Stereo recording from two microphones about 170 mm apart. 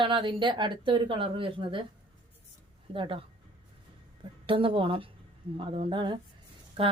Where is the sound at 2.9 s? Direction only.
30° right (ahead or behind).